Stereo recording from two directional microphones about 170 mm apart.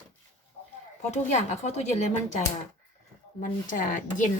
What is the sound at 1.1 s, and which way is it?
A woman's voice, 45° left (ahead or behind).